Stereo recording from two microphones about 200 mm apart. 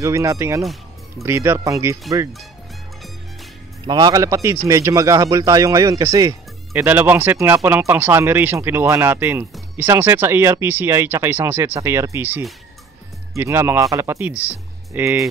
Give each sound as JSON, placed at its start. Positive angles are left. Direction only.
{"t": 0.0, "sound": "speech", "side_deg": -15}
{"t": 3.8, "sound": "speech", "side_deg": -20}